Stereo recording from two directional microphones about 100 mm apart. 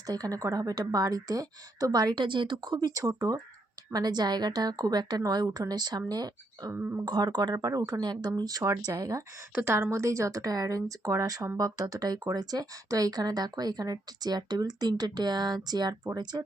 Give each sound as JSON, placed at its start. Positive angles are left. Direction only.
{"t": 0.1, "sound": "a woman's voice", "side_deg": -35}